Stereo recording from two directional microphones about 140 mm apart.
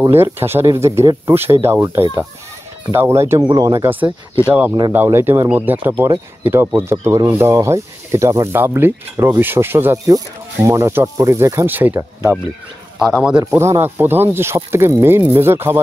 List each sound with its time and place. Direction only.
0.0 s speech: 15° right (ahead or behind)
2.9 s speech: 20° right (ahead or behind)
4.5 s speech: 10° right (ahead or behind)
13.6 s speech: 20° right (ahead or behind)